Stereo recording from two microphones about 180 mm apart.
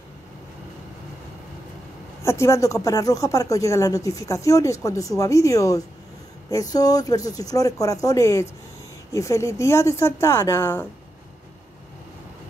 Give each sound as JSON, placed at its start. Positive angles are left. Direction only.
{"t": 2.2, "sound": "speech", "side_deg": 15}